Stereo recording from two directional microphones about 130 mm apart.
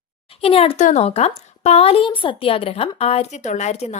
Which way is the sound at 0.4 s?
45° left (ahead or behind).